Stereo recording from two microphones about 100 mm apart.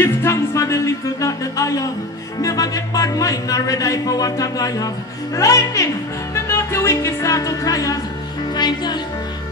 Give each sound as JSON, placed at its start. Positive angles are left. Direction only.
{"t": 0.0, "sound": "speech", "side_deg": 30}
{"t": 6.3, "sound": "music", "side_deg": 25}
{"t": 8.5, "sound": "speech", "side_deg": 45}